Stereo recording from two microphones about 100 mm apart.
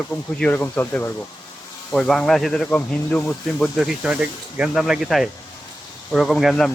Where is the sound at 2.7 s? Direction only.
15° left (ahead or behind).